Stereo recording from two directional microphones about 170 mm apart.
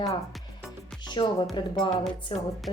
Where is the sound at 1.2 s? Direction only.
25° left (ahead or behind).